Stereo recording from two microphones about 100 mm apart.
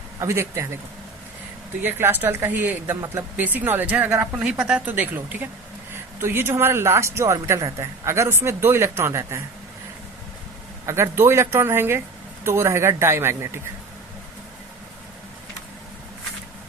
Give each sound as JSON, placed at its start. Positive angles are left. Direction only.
{"t": 0.2, "sound": "speech", "side_deg": -30}
{"t": 1.8, "sound": "speech", "side_deg": -20}
{"t": 10.8, "sound": "speech", "side_deg": -30}